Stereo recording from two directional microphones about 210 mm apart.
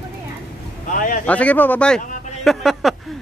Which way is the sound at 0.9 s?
40° left (ahead or behind).